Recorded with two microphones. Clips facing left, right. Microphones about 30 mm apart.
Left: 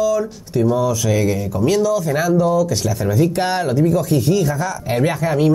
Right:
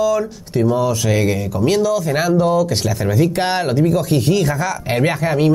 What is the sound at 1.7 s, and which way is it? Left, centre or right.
Speech, right.